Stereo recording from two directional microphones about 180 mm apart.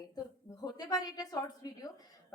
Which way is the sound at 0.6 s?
20° left (ahead or behind).